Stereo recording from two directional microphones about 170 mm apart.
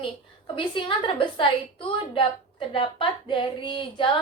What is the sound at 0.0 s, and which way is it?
A woman's voice, 30° left (ahead or behind).